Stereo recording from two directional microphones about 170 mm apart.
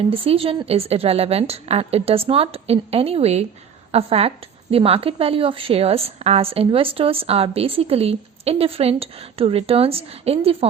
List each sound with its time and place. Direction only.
0.1 s a woman's voice: 35° right (ahead or behind)